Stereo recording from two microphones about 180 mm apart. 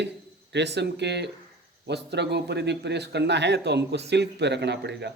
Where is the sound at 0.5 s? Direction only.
70° right (ahead or behind).